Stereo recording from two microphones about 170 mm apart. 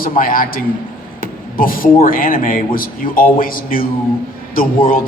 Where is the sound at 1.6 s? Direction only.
55° left (ahead or behind).